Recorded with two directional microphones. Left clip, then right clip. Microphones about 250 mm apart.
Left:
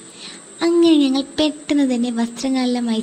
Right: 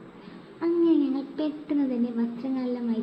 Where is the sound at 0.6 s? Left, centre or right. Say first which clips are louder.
Left 9 dB; left.